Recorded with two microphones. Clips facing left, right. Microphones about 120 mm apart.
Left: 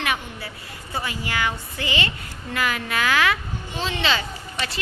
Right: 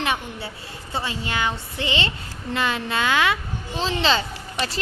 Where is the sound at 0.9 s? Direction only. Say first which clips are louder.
Right 1 dB; 25° right (ahead or behind).